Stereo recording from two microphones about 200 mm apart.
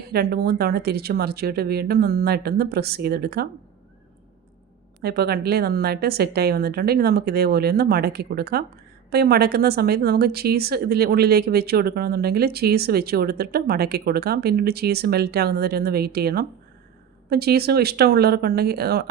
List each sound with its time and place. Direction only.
0.1 s a woman's voice: 50° right (ahead or behind)
5.0 s a woman's voice: 50° right (ahead or behind)